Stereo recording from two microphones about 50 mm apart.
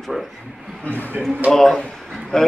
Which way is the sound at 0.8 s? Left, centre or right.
Left.